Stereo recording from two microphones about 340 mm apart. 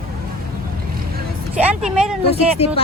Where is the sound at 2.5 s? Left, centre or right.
Centre.